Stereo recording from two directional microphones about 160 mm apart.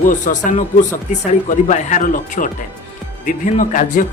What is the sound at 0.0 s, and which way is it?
A man's voice, 55° left (ahead or behind).